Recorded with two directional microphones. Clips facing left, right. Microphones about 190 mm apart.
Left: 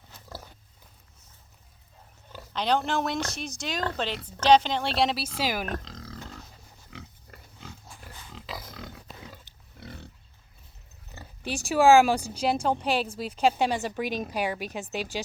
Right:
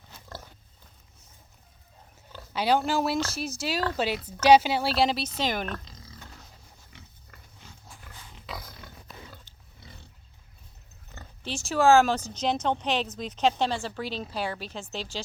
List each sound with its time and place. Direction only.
2.5 s speech: 5° right (ahead or behind)
5.8 s roaring cats: 90° left
9.8 s pig: 60° left (ahead or behind)
11.1 s speech: 10° left (ahead or behind)